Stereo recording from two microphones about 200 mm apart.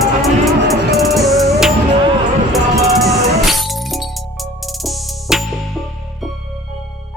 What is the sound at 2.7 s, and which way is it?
Music, 15° right (ahead or behind).